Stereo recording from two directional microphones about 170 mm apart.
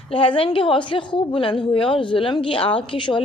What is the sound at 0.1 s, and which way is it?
A woman's voice, 30° left (ahead or behind).